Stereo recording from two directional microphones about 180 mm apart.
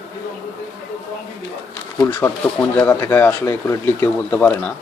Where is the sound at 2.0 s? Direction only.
15° left (ahead or behind).